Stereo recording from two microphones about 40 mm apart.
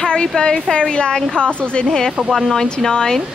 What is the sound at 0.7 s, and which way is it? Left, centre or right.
A woman's voice, left.